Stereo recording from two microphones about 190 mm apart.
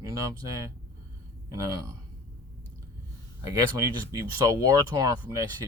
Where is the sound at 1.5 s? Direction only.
20° right (ahead or behind).